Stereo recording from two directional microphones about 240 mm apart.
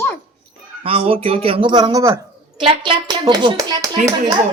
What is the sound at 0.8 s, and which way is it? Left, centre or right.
A woman's voice, right.